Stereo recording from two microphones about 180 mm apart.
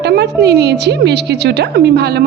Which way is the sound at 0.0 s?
65° right (ahead or behind).